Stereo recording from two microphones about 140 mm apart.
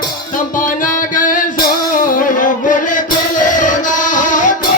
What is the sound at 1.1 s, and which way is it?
Music, 75° left (ahead or behind).